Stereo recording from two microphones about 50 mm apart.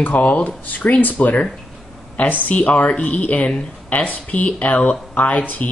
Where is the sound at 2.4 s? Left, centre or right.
Left.